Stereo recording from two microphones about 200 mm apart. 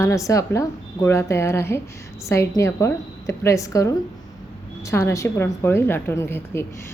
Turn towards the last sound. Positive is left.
turn(degrees=10)  # may be behind; listen again after turning